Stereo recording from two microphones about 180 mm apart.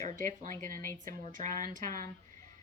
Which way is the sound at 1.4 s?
45° right (ahead or behind).